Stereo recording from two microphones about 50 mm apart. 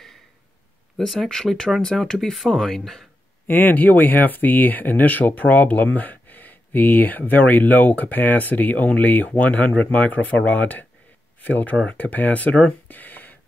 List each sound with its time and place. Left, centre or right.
0.9 s speech: centre
3.4 s speech: left